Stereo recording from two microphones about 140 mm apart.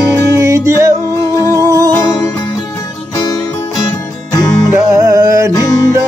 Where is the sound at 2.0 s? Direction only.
25° left (ahead or behind).